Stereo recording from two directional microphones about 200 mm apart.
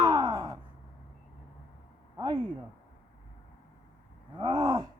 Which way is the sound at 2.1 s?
20° right (ahead or behind).